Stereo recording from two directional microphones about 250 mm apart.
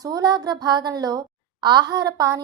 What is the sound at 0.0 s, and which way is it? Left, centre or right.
A woman's voice, centre.